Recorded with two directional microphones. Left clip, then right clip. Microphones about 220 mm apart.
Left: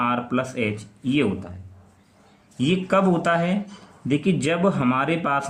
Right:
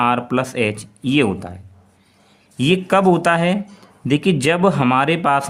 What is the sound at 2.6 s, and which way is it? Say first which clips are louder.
Speech: right 5 dB; 40° right (ahead or behind).